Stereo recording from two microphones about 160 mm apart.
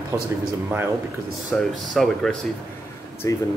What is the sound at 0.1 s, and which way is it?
Speech, 15° right (ahead or behind).